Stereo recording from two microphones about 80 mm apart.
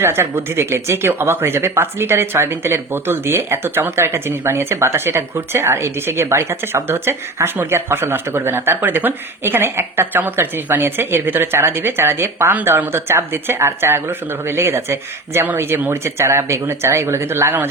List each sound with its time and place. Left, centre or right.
0.0 s speech: right